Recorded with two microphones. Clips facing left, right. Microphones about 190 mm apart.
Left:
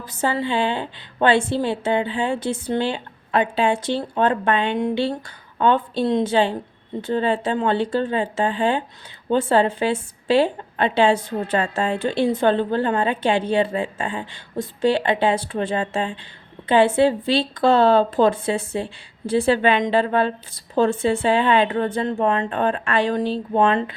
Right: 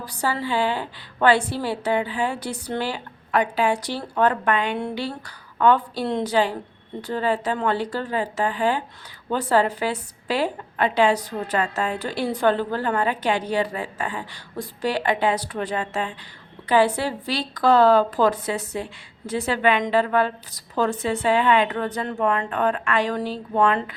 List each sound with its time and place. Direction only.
0.0 s a woman's voice: 20° left (ahead or behind)